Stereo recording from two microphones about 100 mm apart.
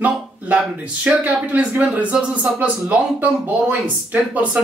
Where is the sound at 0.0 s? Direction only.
10° right (ahead or behind).